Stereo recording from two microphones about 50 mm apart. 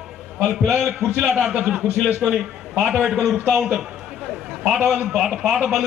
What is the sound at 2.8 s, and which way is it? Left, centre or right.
Speech, centre.